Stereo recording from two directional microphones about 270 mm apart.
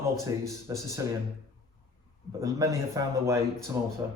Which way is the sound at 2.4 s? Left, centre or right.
Centre.